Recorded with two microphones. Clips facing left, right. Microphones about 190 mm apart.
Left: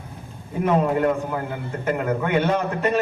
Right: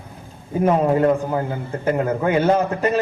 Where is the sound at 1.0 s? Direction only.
40° right (ahead or behind).